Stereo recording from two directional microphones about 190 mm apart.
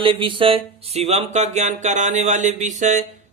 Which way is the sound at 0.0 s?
25° right (ahead or behind).